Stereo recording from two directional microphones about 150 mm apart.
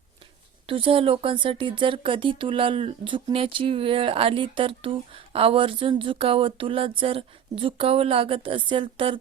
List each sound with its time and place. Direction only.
0.7 s speech: 35° right (ahead or behind)